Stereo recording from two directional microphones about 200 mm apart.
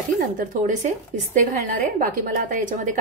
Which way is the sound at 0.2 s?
40° right (ahead or behind).